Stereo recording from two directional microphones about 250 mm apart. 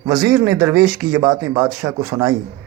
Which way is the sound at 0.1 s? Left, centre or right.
Centre.